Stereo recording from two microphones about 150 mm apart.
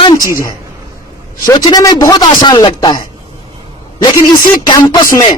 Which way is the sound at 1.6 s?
25° left (ahead or behind).